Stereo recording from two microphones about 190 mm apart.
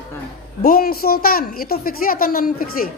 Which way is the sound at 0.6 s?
55° left (ahead or behind).